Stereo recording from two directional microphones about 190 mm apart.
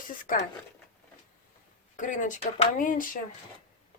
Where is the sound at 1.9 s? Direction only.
40° left (ahead or behind).